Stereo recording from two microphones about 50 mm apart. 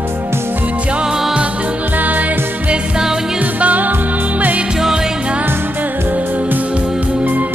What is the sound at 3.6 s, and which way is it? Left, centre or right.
Music, right.